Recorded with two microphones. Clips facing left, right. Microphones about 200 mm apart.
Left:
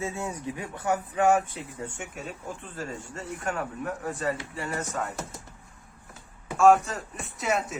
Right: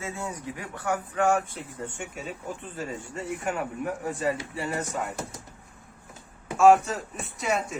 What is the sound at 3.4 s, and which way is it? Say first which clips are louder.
A man's voice: even; 10° right (ahead or behind).